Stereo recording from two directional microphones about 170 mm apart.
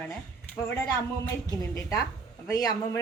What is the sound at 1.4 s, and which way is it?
Speech, 20° left (ahead or behind).